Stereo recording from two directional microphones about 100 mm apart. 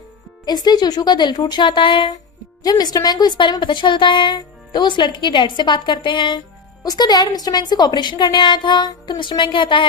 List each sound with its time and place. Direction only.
0.4 s a woman's voice: 45° left (ahead or behind)
2.6 s a woman's voice: 40° left (ahead or behind)
6.8 s a woman's voice: 40° left (ahead or behind)